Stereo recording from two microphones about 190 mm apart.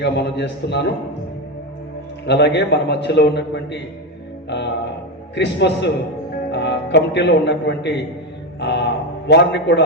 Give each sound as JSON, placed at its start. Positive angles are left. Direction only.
{"t": 0.0, "sound": "a man's voice", "side_deg": 65}
{"t": 2.2, "sound": "a man's voice", "side_deg": 65}
{"t": 4.4, "sound": "mantra", "side_deg": 65}
{"t": 5.3, "sound": "a man's voice", "side_deg": 65}
{"t": 8.5, "sound": "a sound", "side_deg": 65}